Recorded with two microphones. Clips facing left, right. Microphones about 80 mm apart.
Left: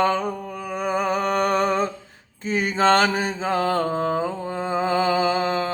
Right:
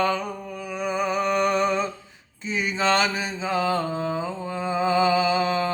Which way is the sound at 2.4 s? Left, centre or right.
Left.